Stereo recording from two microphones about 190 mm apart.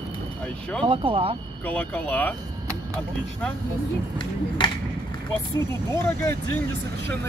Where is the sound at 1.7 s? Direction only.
10° left (ahead or behind).